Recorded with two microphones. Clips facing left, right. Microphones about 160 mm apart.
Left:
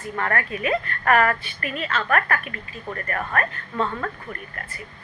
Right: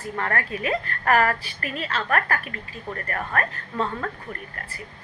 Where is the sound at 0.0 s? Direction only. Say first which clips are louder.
Left 1 dB; 30° right (ahead or behind).